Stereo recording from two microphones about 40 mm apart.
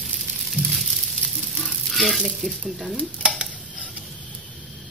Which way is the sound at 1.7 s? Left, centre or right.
Centre.